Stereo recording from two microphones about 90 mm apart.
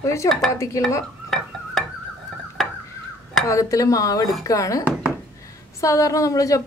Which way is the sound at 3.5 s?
35° left (ahead or behind).